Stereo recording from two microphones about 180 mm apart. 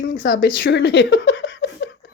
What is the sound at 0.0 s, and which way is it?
Speech, 50° left (ahead or behind).